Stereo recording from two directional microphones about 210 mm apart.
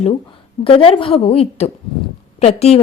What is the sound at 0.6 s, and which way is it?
A woman's voice, 25° left (ahead or behind).